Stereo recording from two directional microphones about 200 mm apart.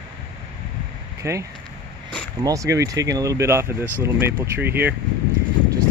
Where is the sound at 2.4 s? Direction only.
15° right (ahead or behind).